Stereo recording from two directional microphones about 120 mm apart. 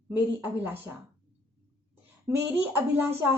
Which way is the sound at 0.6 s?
15° right (ahead or behind).